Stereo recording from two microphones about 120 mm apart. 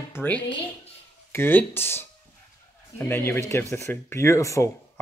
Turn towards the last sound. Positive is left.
turn(degrees=25)  # may be behind; listen again after turning